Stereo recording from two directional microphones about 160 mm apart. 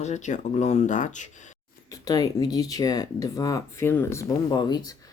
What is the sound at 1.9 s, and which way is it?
Speech, 25° left (ahead or behind).